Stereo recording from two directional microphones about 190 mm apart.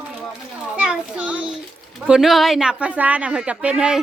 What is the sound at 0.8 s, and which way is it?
Speech, 5° right (ahead or behind).